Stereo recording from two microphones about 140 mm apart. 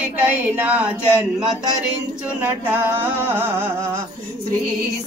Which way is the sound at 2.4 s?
10° right (ahead or behind).